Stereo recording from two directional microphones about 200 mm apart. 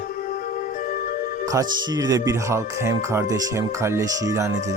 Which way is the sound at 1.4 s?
15° right (ahead or behind).